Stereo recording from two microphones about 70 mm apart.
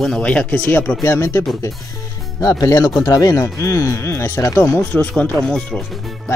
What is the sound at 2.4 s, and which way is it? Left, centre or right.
Speech, left.